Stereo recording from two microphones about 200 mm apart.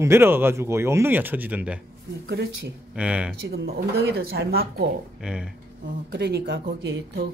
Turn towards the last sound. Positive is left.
turn(degrees=-55)  # may be behind; listen again after turning